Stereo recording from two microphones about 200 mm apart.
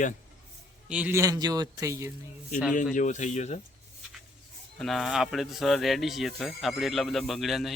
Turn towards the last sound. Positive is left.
turn(degrees=0)  # may be behind; listen again after turning